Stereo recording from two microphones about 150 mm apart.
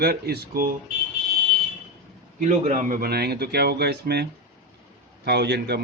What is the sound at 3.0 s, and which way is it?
A man's voice, 90° right.